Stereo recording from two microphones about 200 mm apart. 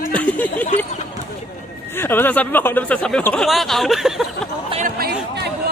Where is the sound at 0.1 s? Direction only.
5° left (ahead or behind).